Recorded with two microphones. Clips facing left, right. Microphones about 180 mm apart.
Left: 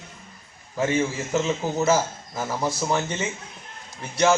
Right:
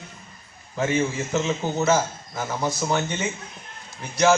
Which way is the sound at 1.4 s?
5° left (ahead or behind).